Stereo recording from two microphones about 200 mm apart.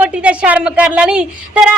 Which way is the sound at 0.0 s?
5° right (ahead or behind).